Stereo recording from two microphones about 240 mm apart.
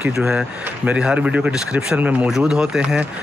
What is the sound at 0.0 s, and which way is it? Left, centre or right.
A man's voice, centre.